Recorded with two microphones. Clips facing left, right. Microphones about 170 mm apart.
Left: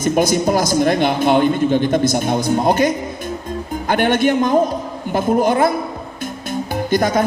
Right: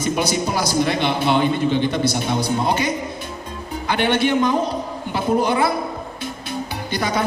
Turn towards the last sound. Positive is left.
turn(degrees=45)  # may be behind; listen again after turning